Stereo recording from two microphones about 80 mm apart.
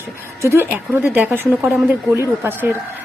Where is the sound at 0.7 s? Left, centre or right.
Right.